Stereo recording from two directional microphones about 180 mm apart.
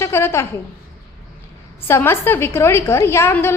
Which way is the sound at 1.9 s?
15° left (ahead or behind).